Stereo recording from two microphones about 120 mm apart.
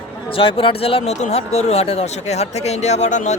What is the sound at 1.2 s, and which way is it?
Speech, 65° left (ahead or behind).